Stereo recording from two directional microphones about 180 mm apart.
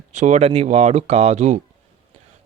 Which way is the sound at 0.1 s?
40° right (ahead or behind).